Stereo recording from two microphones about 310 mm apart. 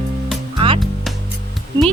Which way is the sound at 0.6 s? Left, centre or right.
Centre.